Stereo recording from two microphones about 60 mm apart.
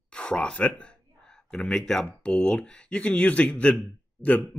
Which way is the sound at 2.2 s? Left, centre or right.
Centre.